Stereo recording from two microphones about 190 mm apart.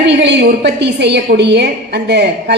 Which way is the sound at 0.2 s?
65° right (ahead or behind).